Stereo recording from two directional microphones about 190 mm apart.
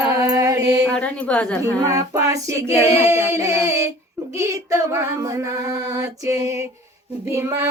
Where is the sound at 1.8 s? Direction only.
15° right (ahead or behind).